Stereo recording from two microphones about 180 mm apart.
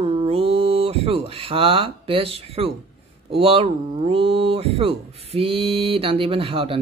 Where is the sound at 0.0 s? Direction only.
35° right (ahead or behind).